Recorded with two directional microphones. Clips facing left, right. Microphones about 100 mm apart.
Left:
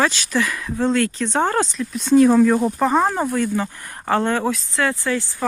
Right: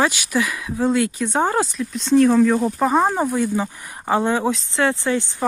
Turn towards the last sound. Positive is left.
turn(degrees=-20)  # may be behind; listen again after turning